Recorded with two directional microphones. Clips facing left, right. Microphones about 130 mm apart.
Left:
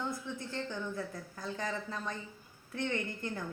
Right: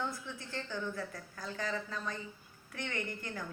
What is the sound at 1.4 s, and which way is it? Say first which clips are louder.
Music: even; 25° left (ahead or behind).